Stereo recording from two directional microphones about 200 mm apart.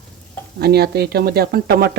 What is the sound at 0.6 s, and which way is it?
Speech, 55° right (ahead or behind).